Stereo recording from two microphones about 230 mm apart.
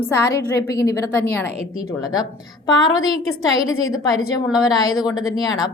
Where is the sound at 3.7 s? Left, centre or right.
Left.